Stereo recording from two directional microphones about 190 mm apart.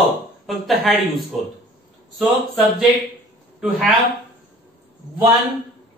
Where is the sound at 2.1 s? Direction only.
5° right (ahead or behind).